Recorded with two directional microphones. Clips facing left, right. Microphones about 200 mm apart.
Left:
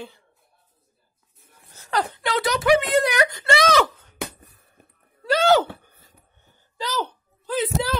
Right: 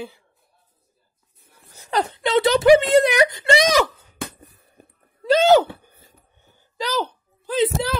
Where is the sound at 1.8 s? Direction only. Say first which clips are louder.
Right 2 dB; 20° right (ahead or behind).